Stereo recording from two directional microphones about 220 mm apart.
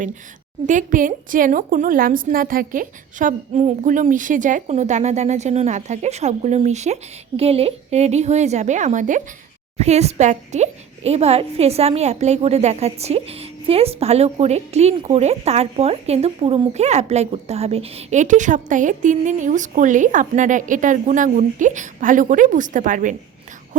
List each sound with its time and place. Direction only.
0.7 s speech: 35° right (ahead or behind)